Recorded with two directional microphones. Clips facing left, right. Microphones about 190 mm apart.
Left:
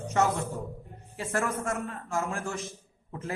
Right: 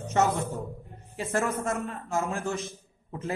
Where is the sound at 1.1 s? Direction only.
20° right (ahead or behind).